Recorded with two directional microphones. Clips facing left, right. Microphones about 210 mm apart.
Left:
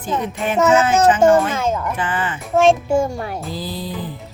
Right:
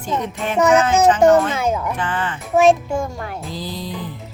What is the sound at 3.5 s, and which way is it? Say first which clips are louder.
Music: left 1 dB; 5° left (ahead or behind).